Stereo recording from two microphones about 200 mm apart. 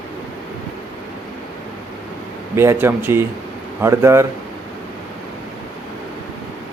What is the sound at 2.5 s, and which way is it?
Speech, 15° right (ahead or behind).